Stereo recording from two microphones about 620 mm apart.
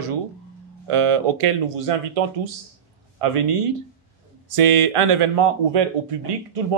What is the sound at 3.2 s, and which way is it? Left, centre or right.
Speech, right.